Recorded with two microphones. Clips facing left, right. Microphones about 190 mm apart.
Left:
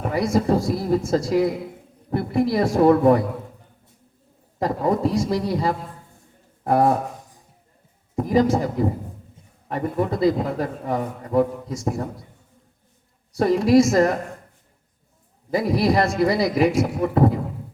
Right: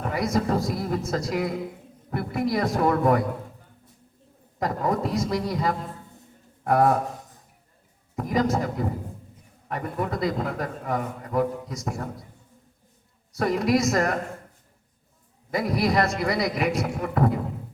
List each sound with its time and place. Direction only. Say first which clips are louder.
0.1 s a man's voice: left 5 dB; 30° left (ahead or behind)
4.6 s a man's voice: left 4 dB; 30° left (ahead or behind)
8.1 s a man's voice: left 5 dB; 30° left (ahead or behind)
9.6 s a man's voice: left 5 dB; 30° left (ahead or behind)
13.3 s a man's voice: left 7 dB; 30° left (ahead or behind)
15.4 s a man's voice: left 4 dB; 30° left (ahead or behind)